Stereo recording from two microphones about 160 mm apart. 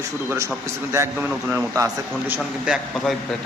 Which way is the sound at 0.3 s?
20° right (ahead or behind).